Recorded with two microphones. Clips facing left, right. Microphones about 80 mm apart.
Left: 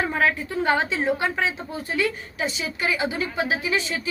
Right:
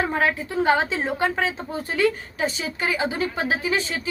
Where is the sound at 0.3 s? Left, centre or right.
Right.